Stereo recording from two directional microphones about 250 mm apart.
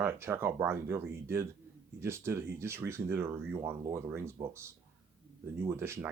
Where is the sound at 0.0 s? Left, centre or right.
Centre.